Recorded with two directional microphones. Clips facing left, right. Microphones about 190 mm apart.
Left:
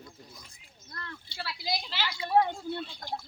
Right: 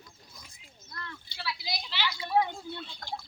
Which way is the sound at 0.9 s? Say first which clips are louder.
Left 2 dB; 40° left (ahead or behind).